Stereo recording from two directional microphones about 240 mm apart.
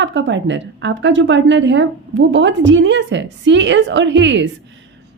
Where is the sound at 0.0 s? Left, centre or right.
Right.